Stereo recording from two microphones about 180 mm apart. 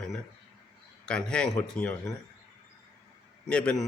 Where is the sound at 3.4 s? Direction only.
5° left (ahead or behind).